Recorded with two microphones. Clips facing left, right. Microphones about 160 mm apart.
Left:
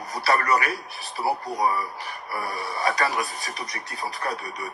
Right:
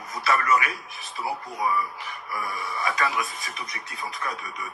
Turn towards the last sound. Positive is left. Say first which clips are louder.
# left 3 dB
turn(degrees=35)  # may be behind; listen again after turning